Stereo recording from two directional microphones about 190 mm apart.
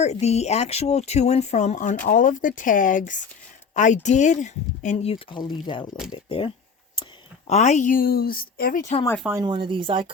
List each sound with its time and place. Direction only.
0.0 s a woman's voice: 35° left (ahead or behind)
9.4 s speech: 25° right (ahead or behind)